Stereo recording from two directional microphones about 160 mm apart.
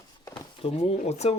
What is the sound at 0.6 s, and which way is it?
Speech, 40° left (ahead or behind).